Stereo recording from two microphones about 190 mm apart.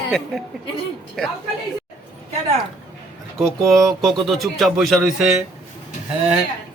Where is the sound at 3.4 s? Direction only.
Centre (ahead or behind).